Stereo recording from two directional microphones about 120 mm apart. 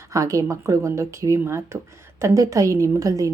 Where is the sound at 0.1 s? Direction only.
25° right (ahead or behind).